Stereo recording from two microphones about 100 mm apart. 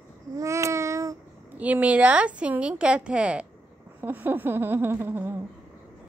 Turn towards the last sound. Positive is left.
turn(degrees=-20)  # may be behind; listen again after turning